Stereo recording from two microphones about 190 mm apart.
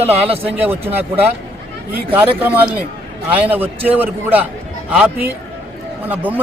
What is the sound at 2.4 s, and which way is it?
A man's voice, 10° right (ahead or behind).